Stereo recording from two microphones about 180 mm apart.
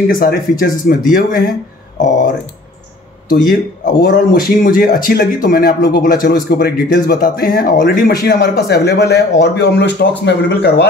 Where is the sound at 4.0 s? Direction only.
50° left (ahead or behind).